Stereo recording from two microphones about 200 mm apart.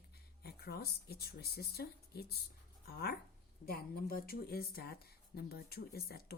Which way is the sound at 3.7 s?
50° left (ahead or behind).